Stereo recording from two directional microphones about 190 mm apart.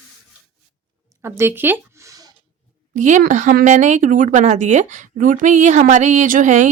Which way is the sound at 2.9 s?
40° right (ahead or behind).